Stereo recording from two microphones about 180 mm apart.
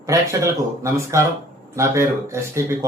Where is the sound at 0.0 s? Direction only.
15° right (ahead or behind).